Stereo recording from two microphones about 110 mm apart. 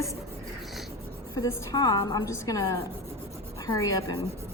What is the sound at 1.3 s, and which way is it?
A woman's voice, 30° left (ahead or behind).